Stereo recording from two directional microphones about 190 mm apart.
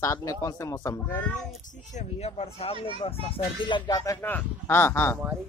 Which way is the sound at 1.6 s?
40° left (ahead or behind).